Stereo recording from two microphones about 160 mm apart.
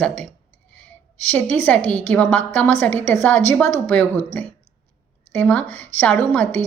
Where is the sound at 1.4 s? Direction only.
10° left (ahead or behind).